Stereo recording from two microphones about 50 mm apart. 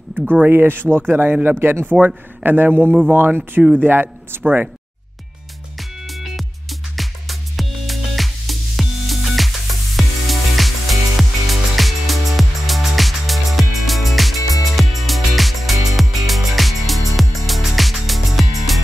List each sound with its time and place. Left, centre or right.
0.3 s speech: right
2.0 s a man's voice: right
5.8 s music: centre